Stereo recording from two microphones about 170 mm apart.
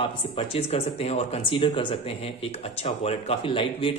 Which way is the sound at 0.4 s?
35° left (ahead or behind).